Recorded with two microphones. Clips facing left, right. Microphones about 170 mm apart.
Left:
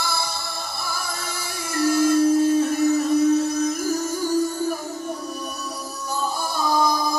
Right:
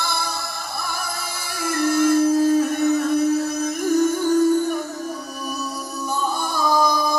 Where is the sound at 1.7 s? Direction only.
55° right (ahead or behind).